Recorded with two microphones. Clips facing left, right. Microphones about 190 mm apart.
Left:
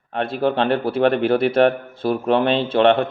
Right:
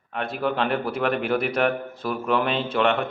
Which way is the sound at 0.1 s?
30° left (ahead or behind).